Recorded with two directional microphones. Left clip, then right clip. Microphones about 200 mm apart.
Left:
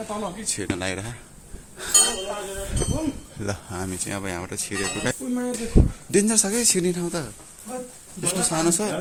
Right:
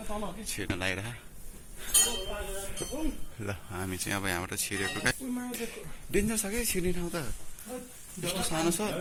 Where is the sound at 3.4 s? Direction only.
15° left (ahead or behind).